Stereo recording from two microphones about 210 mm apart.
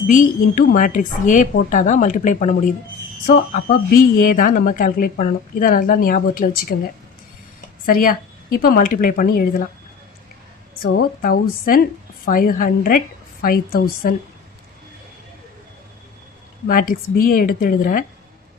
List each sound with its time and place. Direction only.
0.1 s a woman's voice: 40° left (ahead or behind)
7.9 s speech: 45° left (ahead or behind)
10.8 s a woman's voice: 45° left (ahead or behind)
16.6 s a woman's voice: 40° left (ahead or behind)